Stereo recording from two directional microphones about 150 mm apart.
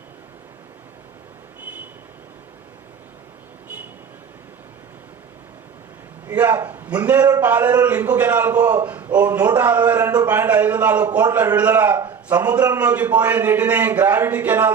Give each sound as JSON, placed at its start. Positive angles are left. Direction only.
{"t": 6.3, "sound": "a man's voice", "side_deg": -15}
{"t": 12.0, "sound": "a sound", "side_deg": -25}
{"t": 12.8, "sound": "a man's voice", "side_deg": -10}